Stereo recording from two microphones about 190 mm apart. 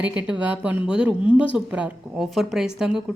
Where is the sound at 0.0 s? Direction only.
5° right (ahead or behind).